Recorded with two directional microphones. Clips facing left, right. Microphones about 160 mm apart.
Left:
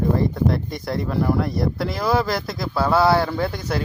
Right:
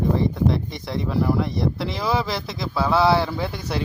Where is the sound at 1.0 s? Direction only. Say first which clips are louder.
Even; centre (ahead or behind).